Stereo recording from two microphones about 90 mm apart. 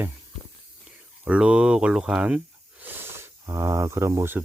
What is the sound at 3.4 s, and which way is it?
Speech, 35° right (ahead or behind).